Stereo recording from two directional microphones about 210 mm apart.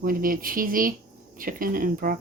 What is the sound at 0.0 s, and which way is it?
Speech, 40° right (ahead or behind).